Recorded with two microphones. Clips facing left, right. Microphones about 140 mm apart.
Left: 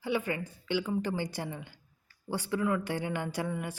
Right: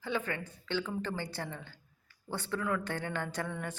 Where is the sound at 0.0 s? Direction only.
10° left (ahead or behind).